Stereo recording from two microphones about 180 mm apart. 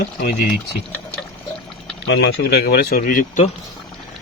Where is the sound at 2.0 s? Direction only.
70° left (ahead or behind); by 3.5 s 45° left (ahead or behind).